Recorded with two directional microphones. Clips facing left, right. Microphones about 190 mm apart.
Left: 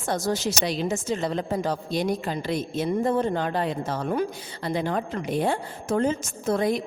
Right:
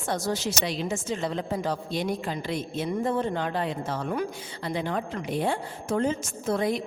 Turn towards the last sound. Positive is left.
turn(degrees=45)  # may be behind; listen again after turning